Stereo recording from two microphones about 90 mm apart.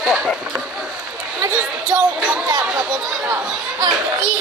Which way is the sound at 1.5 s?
10° right (ahead or behind).